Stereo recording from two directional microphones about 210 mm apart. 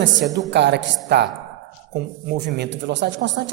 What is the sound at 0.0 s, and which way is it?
A man's voice, 60° right (ahead or behind).